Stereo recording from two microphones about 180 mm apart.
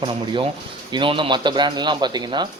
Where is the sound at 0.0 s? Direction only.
30° right (ahead or behind).